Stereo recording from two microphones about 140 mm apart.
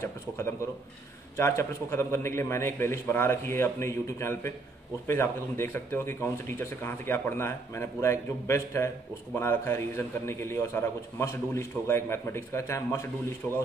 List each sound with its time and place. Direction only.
0.0 s a man's voice: 15° left (ahead or behind)